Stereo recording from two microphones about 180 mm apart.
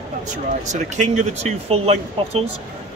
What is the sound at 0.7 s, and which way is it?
Speech, 40° right (ahead or behind).